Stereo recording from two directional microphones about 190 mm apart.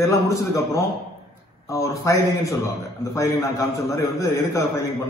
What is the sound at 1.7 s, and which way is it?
A man's voice, 15° left (ahead or behind).